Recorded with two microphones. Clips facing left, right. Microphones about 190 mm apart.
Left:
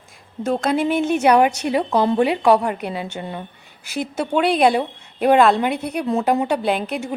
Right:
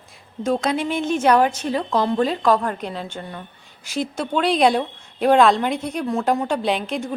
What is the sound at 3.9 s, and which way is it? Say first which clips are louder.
Speech: even; 60° left (ahead or behind).